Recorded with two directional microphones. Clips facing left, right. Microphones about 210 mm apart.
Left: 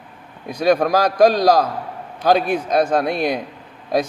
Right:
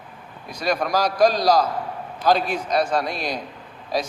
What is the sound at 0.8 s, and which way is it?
A man's voice, 55° left (ahead or behind).